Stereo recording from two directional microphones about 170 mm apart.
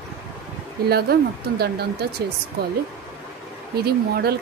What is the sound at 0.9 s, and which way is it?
Speech, 65° right (ahead or behind).